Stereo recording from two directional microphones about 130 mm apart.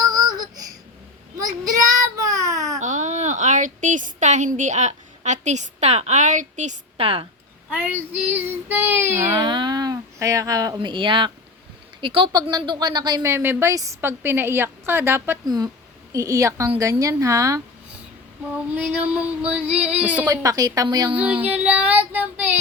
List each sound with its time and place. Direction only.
2.0 s baby cry: 25° right (ahead or behind)
2.7 s speech: 70° right (ahead or behind)
6.9 s a woman's voice: 45° right (ahead or behind)
7.7 s a woman's voice: 15° right (ahead or behind)
9.4 s a woman's voice: 35° right (ahead or behind)
13.3 s a woman's voice: 20° right (ahead or behind)
18.5 s a woman's voice: 10° right (ahead or behind)
20.2 s a woman's voice: 25° right (ahead or behind)
21.2 s a woman's voice: 10° right (ahead or behind)